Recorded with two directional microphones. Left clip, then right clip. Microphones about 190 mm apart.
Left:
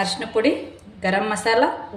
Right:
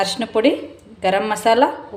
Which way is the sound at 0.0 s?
40° right (ahead or behind).